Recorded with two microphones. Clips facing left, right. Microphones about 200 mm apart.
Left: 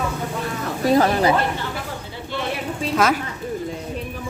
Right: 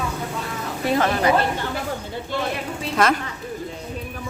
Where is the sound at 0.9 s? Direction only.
35° left (ahead or behind).